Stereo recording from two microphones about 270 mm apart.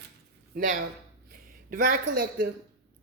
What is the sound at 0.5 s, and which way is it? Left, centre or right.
Speech, right.